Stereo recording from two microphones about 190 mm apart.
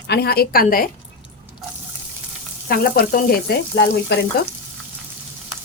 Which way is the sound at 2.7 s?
50° left (ahead or behind).